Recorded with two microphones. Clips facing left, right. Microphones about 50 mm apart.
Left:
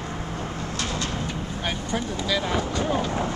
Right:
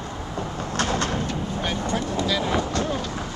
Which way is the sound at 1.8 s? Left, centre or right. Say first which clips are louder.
Right 3 dB; centre.